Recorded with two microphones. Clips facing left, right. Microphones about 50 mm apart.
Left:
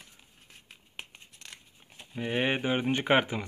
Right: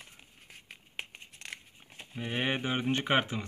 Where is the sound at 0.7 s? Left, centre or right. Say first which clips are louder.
Right 3 dB; centre.